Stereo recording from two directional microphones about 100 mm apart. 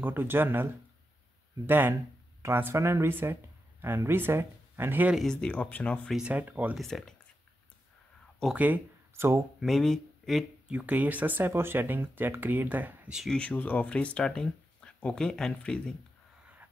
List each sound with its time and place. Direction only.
0.0 s speech: 20° right (ahead or behind)
1.7 s speech: 20° right (ahead or behind)
5.1 s speech: 5° left (ahead or behind)
6.0 s speech: 5° right (ahead or behind)
6.3 s speech: 15° right (ahead or behind)
6.8 s speech: 5° left (ahead or behind)
8.5 s speech: 15° right (ahead or behind)
9.6 s speech: 5° left (ahead or behind)
10.7 s speech: 15° right (ahead or behind)
13.3 s speech: 10° left (ahead or behind)